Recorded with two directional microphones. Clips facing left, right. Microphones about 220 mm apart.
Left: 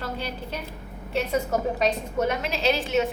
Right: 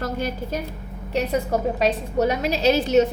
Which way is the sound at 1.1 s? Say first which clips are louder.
Right 3 dB; 35° right (ahead or behind).